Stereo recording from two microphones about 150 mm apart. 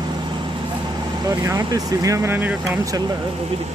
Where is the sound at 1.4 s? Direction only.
25° right (ahead or behind).